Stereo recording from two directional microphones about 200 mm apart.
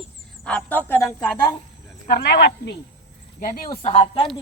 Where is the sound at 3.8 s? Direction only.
30° left (ahead or behind).